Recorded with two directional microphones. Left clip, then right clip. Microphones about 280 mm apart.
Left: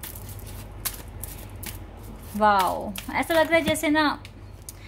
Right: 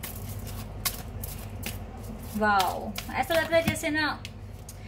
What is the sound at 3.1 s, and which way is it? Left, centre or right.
Speech, left.